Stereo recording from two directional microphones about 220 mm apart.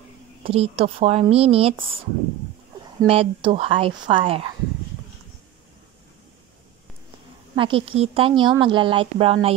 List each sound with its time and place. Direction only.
0.4 s speech: 25° right (ahead or behind)
3.0 s speech: 25° right (ahead or behind)
7.5 s speech: 25° right (ahead or behind)